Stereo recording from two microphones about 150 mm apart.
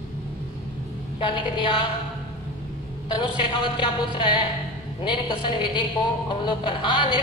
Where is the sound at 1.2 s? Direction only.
35° left (ahead or behind).